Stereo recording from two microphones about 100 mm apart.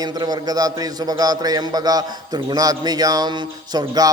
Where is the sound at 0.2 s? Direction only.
40° right (ahead or behind).